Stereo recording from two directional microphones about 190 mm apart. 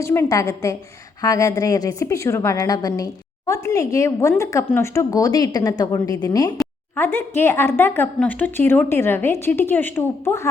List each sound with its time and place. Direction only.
0.0 s speech: 15° left (ahead or behind)